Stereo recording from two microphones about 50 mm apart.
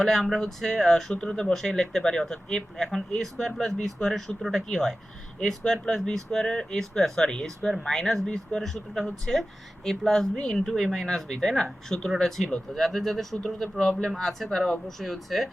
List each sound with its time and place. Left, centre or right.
0.0 s speech: centre